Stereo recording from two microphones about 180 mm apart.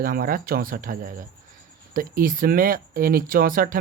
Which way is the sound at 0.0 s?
50° right (ahead or behind).